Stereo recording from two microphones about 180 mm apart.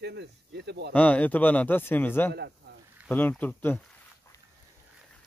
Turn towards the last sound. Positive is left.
turn(degrees=10)  # may be behind; listen again after turning